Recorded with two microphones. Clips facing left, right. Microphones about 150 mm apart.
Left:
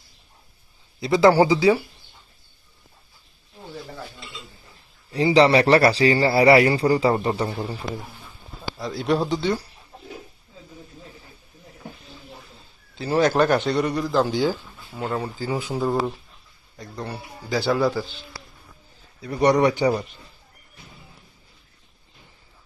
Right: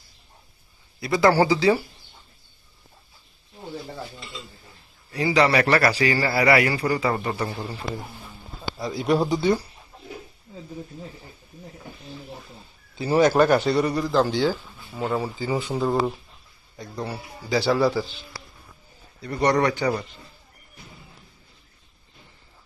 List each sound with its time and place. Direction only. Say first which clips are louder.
0.9 s speech: left 3 dB; 20° left (ahead or behind)
5.1 s a man's voice: left 4 dB; 30° left (ahead or behind)
8.8 s speech: right 1 dB; 5° right (ahead or behind)
13.0 s a man's voice: right 1 dB; 10° right (ahead or behind)
19.4 s speech: left 3 dB; 15° left (ahead or behind)